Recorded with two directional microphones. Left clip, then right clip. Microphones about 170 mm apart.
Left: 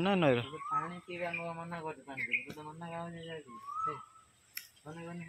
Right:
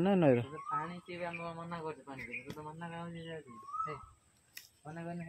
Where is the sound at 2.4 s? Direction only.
15° left (ahead or behind).